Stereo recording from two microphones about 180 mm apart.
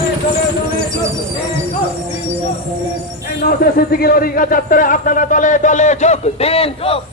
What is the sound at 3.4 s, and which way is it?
A man's voice, 55° left (ahead or behind).